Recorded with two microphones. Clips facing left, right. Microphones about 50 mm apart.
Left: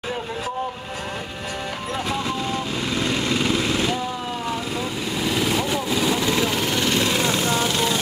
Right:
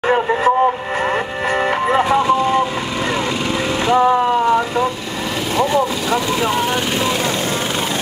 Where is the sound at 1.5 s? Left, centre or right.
Right.